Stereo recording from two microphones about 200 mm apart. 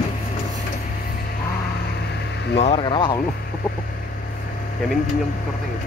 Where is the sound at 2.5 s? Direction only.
25° left (ahead or behind).